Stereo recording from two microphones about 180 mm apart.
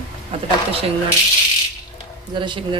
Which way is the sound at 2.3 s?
25° right (ahead or behind).